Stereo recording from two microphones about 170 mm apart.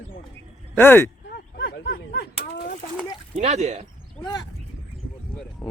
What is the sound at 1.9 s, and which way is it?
Speech, 60° left (ahead or behind).